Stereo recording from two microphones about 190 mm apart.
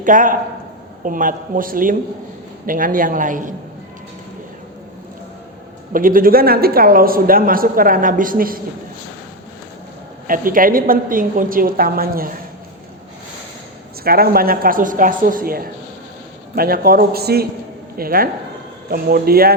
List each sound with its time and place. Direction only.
0.0 s speech: 45° right (ahead or behind)
5.9 s speech: 45° right (ahead or behind)
10.2 s speech: 45° right (ahead or behind)
14.0 s speech: 50° right (ahead or behind)